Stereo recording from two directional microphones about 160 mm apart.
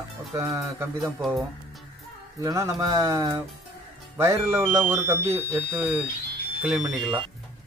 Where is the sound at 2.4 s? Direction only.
20° right (ahead or behind).